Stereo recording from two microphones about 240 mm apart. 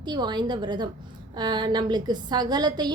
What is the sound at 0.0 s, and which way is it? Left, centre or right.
A woman's voice, centre.